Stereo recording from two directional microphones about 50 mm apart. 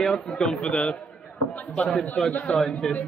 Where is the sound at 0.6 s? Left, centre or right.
Left.